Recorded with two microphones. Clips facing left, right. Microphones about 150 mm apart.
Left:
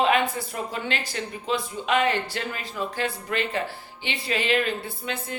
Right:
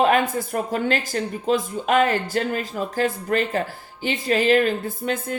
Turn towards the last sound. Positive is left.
turn(degrees=-45)  # may be behind; listen again after turning